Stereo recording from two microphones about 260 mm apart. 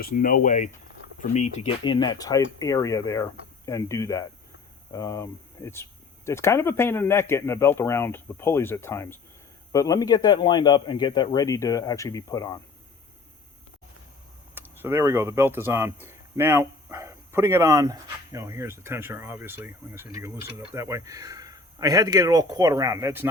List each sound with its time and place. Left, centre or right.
0.0 s speech: left; by 12.5 s centre
14.5 s speech: centre